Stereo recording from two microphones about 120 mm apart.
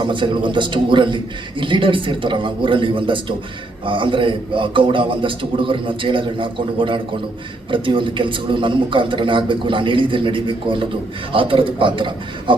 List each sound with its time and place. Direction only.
0.0 s a man's voice: 40° right (ahead or behind)